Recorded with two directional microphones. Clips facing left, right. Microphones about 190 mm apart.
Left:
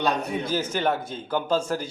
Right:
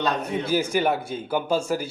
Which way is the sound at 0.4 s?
10° right (ahead or behind).